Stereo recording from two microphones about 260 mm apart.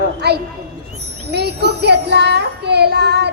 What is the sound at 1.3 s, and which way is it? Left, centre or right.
Music, right.